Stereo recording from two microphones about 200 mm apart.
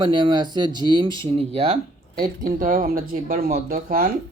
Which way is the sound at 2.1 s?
45° right (ahead or behind).